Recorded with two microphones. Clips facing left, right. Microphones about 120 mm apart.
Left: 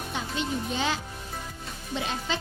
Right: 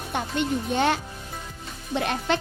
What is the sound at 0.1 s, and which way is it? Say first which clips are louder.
A child's voice: right 6 dB; 60° right (ahead or behind).